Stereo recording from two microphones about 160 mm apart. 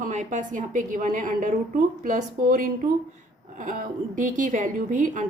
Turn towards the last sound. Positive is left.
turn(degrees=-55)  # may be behind; listen again after turning